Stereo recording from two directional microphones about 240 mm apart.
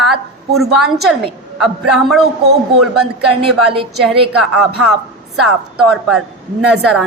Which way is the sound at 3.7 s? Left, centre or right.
Right.